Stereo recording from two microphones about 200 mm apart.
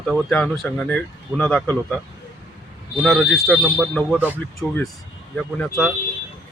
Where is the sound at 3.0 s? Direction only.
Centre (ahead or behind).